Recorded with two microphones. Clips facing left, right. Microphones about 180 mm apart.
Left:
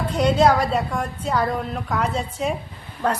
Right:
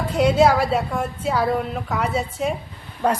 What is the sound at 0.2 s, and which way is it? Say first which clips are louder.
A woman's voice: right 1 dB; 10° right (ahead or behind).